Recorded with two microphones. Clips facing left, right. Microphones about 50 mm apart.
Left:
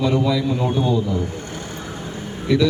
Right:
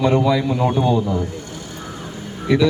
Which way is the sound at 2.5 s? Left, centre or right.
Centre.